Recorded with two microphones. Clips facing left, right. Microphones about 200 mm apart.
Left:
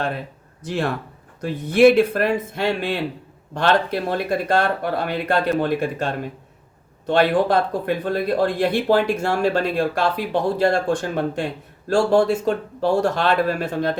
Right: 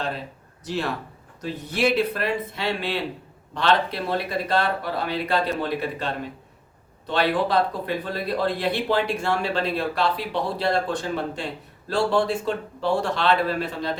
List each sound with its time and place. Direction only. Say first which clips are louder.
0.6 s speech: left 4 dB; 50° left (ahead or behind)